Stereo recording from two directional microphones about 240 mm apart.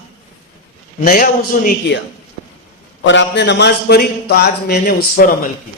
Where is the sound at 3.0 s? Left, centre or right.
Left.